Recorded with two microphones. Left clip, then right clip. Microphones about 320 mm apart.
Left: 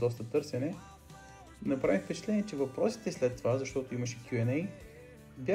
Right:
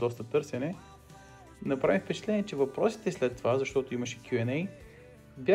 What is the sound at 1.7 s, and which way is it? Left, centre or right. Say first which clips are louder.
Speech: right 3 dB; centre.